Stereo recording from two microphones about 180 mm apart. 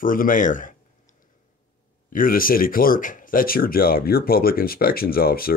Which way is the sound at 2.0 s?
50° left (ahead or behind).